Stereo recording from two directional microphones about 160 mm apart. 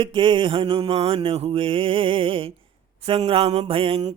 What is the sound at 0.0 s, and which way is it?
Mantra, 30° right (ahead or behind).